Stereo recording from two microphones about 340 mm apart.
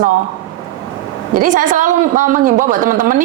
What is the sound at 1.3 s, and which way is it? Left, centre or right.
A woman's voice, right.